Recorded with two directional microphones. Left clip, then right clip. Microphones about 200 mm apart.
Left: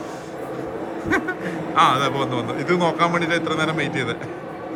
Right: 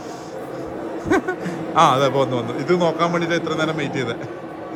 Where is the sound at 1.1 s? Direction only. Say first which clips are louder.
Right 2 dB; 25° right (ahead or behind).